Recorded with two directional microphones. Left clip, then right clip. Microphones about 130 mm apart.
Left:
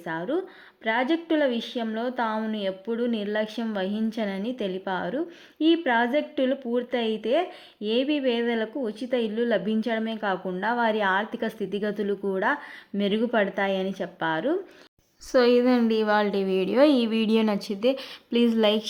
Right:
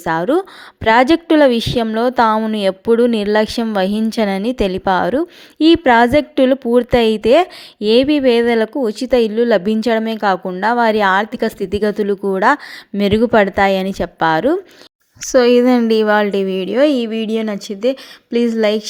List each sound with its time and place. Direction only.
0.0 s a woman's voice: 65° right (ahead or behind)
15.3 s a woman's voice: 45° right (ahead or behind); by 17.5 s 15° right (ahead or behind)
17.5 s a woman's voice: 30° right (ahead or behind)